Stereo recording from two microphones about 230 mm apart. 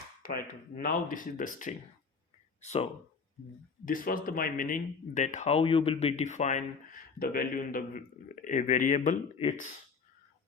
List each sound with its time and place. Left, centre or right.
0.2 s speech: left